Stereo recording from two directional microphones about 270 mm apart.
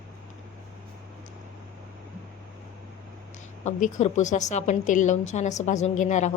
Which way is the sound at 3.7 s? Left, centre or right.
Left.